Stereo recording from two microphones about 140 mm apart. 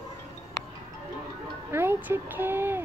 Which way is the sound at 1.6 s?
15° right (ahead or behind).